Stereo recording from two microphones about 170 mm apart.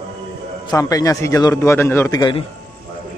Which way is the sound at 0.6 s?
20° left (ahead or behind).